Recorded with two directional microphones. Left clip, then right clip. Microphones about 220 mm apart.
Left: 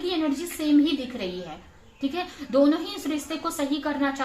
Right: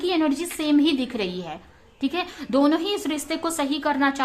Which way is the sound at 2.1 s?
40° right (ahead or behind).